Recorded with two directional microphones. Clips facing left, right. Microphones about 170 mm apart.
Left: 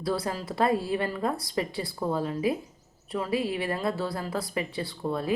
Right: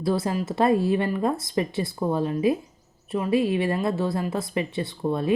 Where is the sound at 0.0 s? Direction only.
25° right (ahead or behind).